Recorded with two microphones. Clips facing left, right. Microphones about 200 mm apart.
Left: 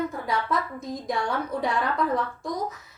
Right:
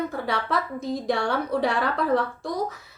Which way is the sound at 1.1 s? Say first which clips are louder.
Right 3 dB; 75° right (ahead or behind).